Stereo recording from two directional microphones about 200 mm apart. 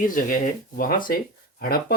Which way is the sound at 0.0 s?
45° left (ahead or behind).